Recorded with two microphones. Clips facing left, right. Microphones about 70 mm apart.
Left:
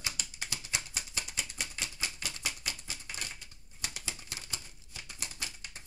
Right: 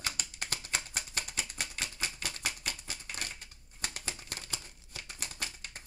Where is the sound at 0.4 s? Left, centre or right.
Right.